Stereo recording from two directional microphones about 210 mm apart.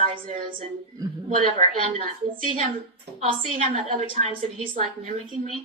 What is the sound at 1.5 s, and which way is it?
Speech, 35° right (ahead or behind).